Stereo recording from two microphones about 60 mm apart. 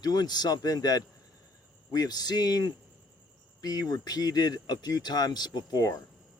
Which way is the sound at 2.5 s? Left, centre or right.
Left.